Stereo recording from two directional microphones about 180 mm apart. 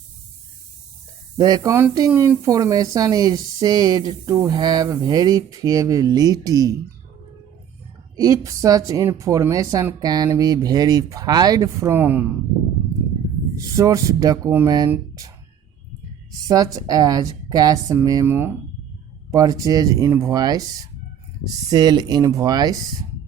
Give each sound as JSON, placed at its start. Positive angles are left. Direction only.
{"t": 1.4, "sound": "speech", "side_deg": -20}
{"t": 8.1, "sound": "speech", "side_deg": -20}
{"t": 13.6, "sound": "speech", "side_deg": -20}
{"t": 16.5, "sound": "speech", "side_deg": -20}